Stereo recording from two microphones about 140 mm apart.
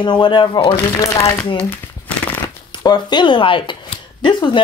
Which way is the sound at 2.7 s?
30° left (ahead or behind).